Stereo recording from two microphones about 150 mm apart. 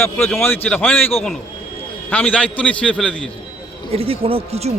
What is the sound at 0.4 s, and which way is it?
A man's voice, 10° left (ahead or behind).